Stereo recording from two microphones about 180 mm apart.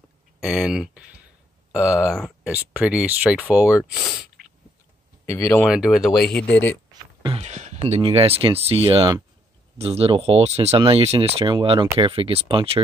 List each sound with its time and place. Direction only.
0.4 s speech: centre (ahead or behind)
1.8 s speech: 15° left (ahead or behind)
2.0 s speech: centre (ahead or behind)
5.2 s speech: 15° left (ahead or behind)
5.7 s speech: centre (ahead or behind)
6.9 s a sound: 25° right (ahead or behind)
7.4 s speech: 40° right (ahead or behind)